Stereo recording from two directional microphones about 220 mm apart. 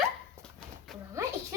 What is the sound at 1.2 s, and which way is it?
Music, 15° right (ahead or behind).